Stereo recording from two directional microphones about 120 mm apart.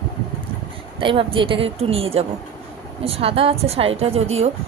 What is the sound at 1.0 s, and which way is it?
A woman's voice, 45° right (ahead or behind).